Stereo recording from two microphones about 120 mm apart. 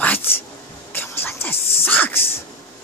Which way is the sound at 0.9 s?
20° left (ahead or behind).